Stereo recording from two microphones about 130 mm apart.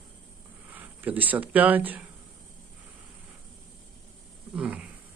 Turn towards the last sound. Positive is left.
turn(degrees=-10)  # may be behind; listen again after turning